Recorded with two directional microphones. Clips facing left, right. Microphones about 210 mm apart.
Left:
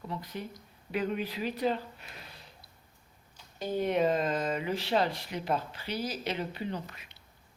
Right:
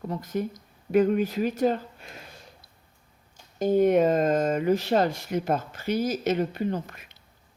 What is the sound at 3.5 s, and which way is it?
Speech, 45° right (ahead or behind).